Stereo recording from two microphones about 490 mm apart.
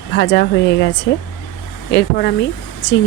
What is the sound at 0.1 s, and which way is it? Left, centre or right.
Speech, left.